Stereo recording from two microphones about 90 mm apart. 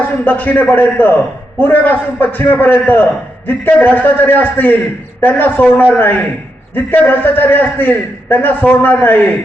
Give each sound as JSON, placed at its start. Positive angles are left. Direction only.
{"t": 0.3, "sound": "a man's voice", "side_deg": 20}